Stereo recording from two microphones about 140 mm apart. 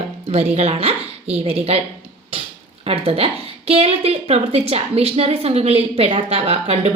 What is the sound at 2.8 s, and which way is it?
A woman's voice, 45° right (ahead or behind).